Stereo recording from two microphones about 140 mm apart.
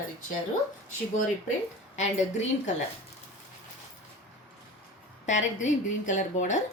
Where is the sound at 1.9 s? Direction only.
55° left (ahead or behind).